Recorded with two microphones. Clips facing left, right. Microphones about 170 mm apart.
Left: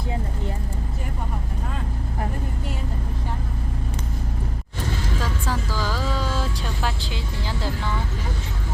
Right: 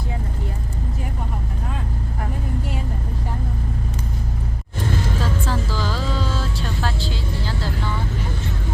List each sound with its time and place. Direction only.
5.5 s music: 10° left (ahead or behind)
6.8 s vehicle: 15° left (ahead or behind)